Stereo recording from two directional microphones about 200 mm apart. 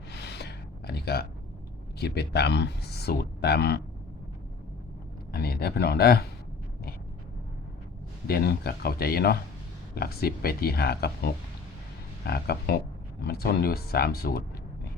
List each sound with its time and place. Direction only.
0.1 s a sound: 55° left (ahead or behind)
2.0 s speech: 55° left (ahead or behind)
5.3 s speech: 50° left (ahead or behind)
8.3 s speech: 50° left (ahead or behind)